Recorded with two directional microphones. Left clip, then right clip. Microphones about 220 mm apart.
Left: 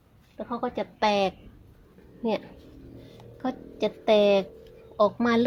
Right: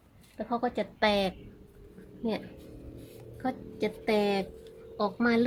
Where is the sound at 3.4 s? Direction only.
30° left (ahead or behind).